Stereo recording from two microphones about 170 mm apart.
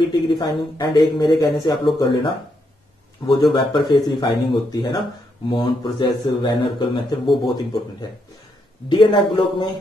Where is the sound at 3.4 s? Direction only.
25° left (ahead or behind).